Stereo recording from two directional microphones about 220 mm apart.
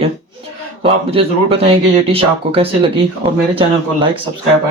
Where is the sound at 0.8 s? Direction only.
25° right (ahead or behind).